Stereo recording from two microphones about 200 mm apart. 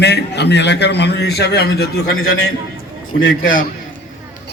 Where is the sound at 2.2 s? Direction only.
90° left.